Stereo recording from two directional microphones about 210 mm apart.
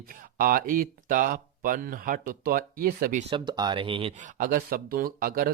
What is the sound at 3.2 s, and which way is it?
Speech, 20° right (ahead or behind).